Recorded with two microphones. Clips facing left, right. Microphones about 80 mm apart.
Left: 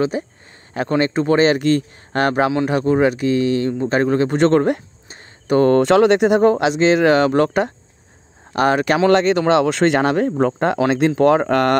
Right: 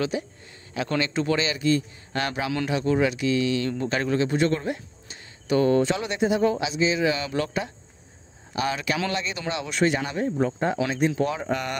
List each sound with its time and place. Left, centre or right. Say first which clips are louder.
0.1 s speech: left 5 dB; left
1.4 s speech: left 9 dB; left
4.3 s a sound: left 9 dB; left
5.8 s speech: left 11 dB; left
9.1 s speech: left 15 dB; left
10.9 s speech: left 10 dB; left